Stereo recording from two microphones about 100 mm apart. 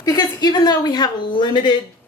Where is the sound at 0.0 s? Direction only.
45° left (ahead or behind).